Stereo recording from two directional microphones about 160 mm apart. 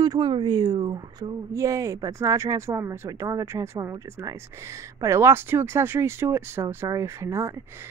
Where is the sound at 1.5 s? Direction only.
20° right (ahead or behind).